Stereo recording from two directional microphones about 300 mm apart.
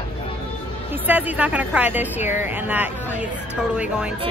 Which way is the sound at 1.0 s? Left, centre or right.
Centre.